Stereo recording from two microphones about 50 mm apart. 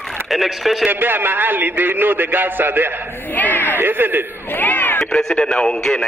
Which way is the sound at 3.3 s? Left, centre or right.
Left.